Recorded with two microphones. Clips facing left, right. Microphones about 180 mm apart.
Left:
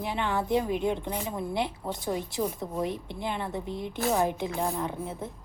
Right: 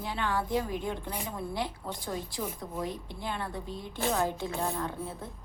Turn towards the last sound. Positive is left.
turn(degrees=20)  # may be behind; listen again after turning